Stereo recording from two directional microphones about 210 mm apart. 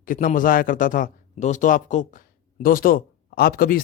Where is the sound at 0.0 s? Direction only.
40° left (ahead or behind).